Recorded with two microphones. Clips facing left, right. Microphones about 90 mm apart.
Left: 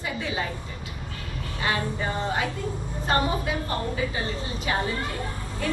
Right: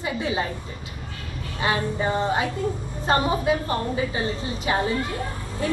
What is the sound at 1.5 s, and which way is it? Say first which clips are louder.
Speech: right 3 dB; 25° right (ahead or behind).